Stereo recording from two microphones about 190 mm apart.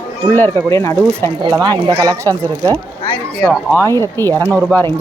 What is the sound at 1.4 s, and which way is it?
Speech, 20° right (ahead or behind).